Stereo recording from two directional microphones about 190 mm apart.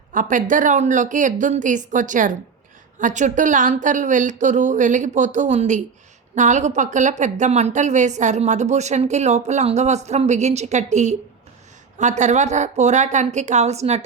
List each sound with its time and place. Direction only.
0.1 s a woman's voice: 45° right (ahead or behind)